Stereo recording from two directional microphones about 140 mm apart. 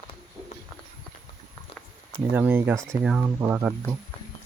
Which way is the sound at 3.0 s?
5° right (ahead or behind).